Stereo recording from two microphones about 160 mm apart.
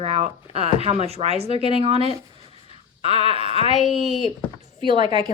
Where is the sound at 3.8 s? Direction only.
Centre (ahead or behind).